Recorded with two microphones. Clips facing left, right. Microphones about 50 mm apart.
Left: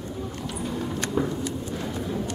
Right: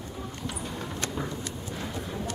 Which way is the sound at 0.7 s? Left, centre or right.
Centre.